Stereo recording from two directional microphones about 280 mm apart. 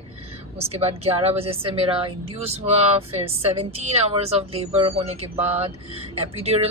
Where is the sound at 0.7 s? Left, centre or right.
Right.